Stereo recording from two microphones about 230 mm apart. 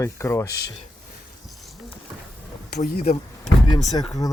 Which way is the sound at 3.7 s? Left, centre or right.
Centre.